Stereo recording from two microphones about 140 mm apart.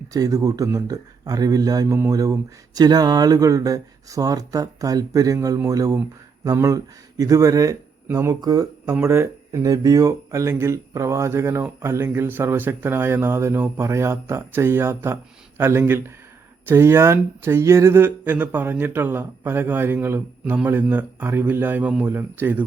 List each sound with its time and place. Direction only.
0.1 s speech: 25° right (ahead or behind)